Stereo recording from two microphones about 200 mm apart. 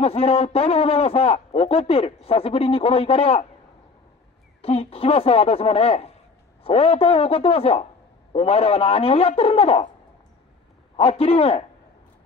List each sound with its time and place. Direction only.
0.0 s a man's voice: 30° left (ahead or behind)
4.6 s a man's voice: 30° left (ahead or behind)
11.0 s a man's voice: 30° left (ahead or behind)